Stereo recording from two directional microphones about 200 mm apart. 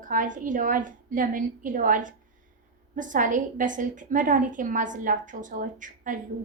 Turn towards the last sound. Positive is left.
turn(degrees=-40)  # may be behind; listen again after turning